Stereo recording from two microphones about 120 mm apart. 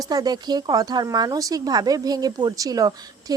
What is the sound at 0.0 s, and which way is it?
A woman's voice, 30° right (ahead or behind).